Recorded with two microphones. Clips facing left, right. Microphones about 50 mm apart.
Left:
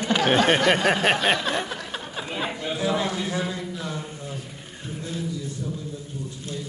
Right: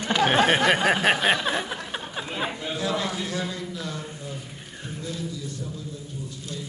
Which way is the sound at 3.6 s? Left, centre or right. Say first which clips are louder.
Left 1 dB; centre.